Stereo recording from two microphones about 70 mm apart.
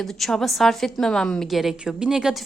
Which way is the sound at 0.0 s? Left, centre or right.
Centre.